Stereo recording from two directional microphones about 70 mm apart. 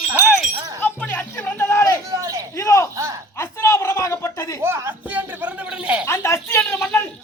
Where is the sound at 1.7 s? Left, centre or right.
Left.